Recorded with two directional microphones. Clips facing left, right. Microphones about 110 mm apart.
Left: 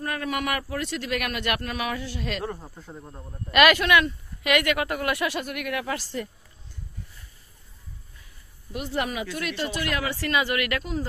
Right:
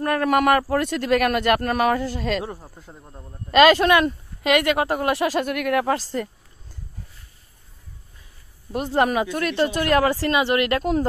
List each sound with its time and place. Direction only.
0.0 s speech: 55° right (ahead or behind); by 2.4 s 35° right (ahead or behind)
2.4 s speech: 5° right (ahead or behind)
3.5 s speech: 30° right (ahead or behind)
5.4 s speech: 55° right (ahead or behind); by 6.2 s 40° right (ahead or behind)
8.7 s speech: 40° right (ahead or behind)
10.8 s speech: 50° right (ahead or behind)